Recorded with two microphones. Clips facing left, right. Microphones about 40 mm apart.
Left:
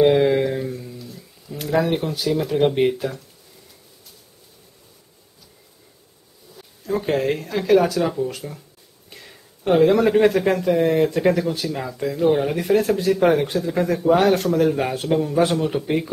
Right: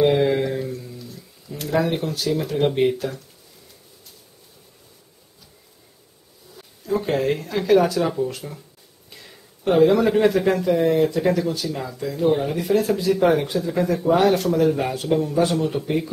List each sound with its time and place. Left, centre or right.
0.0 s a sound: centre
6.9 s speech: centre
9.1 s speech: centre
12.6 s speech: left
13.5 s speech: centre